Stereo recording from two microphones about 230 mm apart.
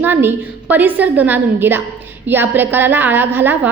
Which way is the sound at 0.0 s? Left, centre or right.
Centre.